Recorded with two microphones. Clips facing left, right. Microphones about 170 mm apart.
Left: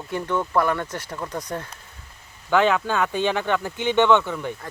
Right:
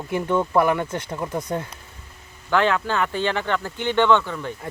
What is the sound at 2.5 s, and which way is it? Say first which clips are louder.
Speech: left 1 dB; 15° left (ahead or behind).